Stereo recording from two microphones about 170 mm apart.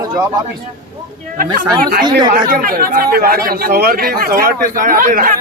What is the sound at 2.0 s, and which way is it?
Speech, 25° right (ahead or behind).